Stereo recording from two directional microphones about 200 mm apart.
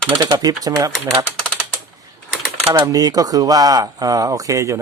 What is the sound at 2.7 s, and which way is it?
Speech, 20° right (ahead or behind).